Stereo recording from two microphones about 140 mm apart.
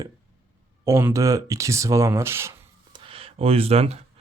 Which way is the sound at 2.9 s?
40° right (ahead or behind).